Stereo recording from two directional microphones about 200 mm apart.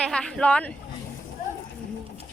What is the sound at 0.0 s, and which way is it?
Speech, 5° left (ahead or behind).